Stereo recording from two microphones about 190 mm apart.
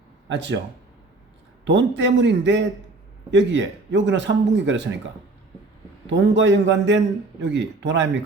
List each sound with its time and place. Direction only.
0.3 s speech: 70° right (ahead or behind)
1.6 s speech: 70° right (ahead or behind)
6.1 s speech: 70° right (ahead or behind)